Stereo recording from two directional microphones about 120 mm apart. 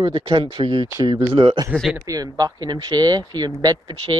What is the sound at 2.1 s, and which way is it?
Speech, 30° right (ahead or behind).